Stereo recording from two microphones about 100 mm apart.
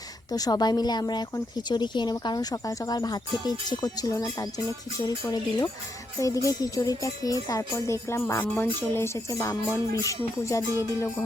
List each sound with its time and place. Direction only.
0.3 s speech: 40° left (ahead or behind); by 9.0 s 20° left (ahead or behind)
9.4 s speech: 35° left (ahead or behind)